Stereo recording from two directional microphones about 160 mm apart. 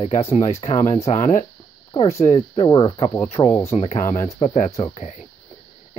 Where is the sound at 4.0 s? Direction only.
50° left (ahead or behind).